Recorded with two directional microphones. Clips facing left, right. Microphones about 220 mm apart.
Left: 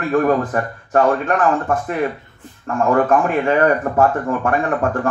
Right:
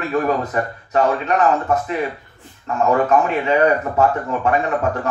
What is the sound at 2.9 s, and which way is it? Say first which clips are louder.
Speech: left 2 dB; 50° left (ahead or behind).